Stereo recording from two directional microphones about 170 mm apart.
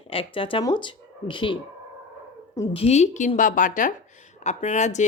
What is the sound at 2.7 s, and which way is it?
A woman's voice, 40° left (ahead or behind).